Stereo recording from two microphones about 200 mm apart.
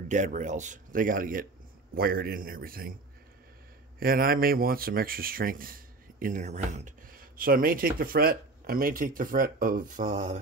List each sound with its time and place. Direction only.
0.1 s speech: 40° right (ahead or behind)
4.0 s speech: 45° right (ahead or behind)